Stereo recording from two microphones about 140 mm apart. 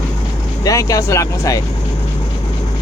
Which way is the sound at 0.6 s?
25° left (ahead or behind).